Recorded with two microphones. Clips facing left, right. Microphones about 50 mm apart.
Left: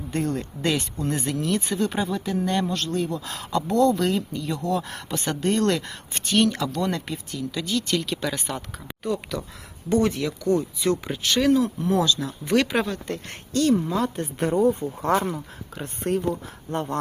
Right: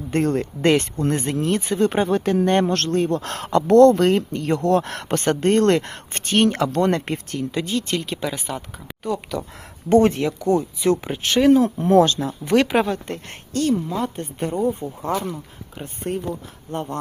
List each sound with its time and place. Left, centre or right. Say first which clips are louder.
0.1 s a man's voice: right 6 dB; right
2.0 s a man's voice: right 7 dB; right
7.5 s speech: right 1 dB; right; by 8.5 s centre
9.0 s a woman's voice: right 2 dB; centre
9.9 s speech: right 6 dB; right
10.5 s speech: right 3 dB; centre
11.5 s speech: right 6 dB; right
12.2 s speech: right 4 dB; right
13.9 s a woman's voice: even; centre
15.1 s speech: left 2 dB; left
15.8 s a woman's voice: left 2 dB; centre